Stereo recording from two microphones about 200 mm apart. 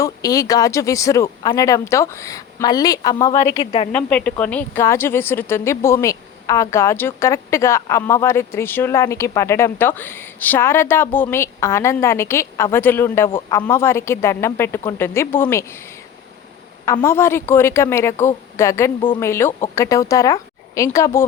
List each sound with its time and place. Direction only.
0.0 s a woman's voice: 15° left (ahead or behind)
3.5 s a woman's voice: 30° left (ahead or behind)
3.9 s a woman's voice: 5° left (ahead or behind)
16.8 s a woman's voice: 15° left (ahead or behind)